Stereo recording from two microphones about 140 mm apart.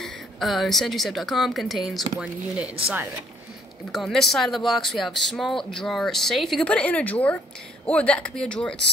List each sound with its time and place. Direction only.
0.0 s speech: centre (ahead or behind)
3.9 s speech: centre (ahead or behind)